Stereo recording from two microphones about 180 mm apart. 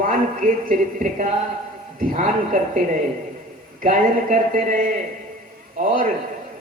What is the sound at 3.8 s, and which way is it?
Speech, 45° right (ahead or behind).